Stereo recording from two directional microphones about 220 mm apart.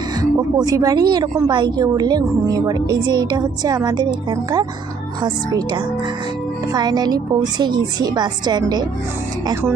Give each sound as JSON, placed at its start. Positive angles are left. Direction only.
{"t": 0.2, "sound": "a woman's voice", "side_deg": -15}